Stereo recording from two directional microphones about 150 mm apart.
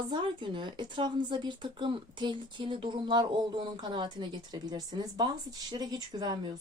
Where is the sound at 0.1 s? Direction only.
30° right (ahead or behind).